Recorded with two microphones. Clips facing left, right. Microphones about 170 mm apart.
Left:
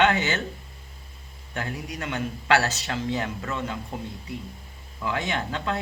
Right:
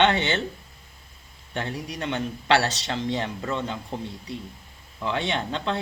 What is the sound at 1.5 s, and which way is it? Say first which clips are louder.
A man's voice: right 2 dB; 30° right (ahead or behind).